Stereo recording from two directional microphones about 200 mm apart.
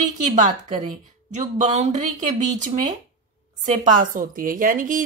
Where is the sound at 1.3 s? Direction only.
35° right (ahead or behind).